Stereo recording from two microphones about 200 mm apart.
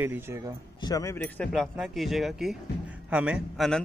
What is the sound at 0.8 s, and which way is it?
A man's voice, 15° left (ahead or behind).